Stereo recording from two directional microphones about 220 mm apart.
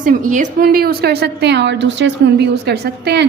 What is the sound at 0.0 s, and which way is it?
A woman's voice, 40° right (ahead or behind).